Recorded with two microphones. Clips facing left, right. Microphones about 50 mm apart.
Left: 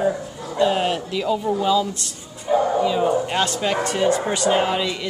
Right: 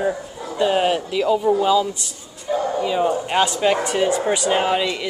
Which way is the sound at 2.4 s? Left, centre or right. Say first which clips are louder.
Left 3 dB; centre.